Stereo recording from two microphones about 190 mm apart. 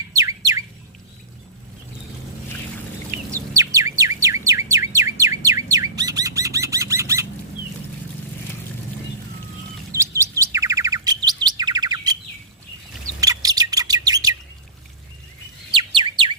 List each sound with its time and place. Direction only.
0.1 s bird: 15° right (ahead or behind)
3.3 s bird: 15° right (ahead or behind)
10.2 s bird: 15° right (ahead or behind)
13.1 s bird: 20° right (ahead or behind)
16.0 s bird: 25° right (ahead or behind)